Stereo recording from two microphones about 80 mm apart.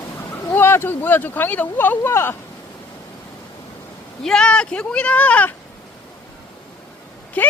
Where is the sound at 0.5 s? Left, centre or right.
Left.